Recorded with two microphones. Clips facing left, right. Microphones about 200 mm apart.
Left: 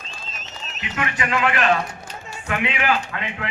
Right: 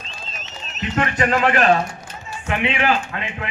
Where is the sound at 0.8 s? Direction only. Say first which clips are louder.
Right 6 dB; 40° right (ahead or behind).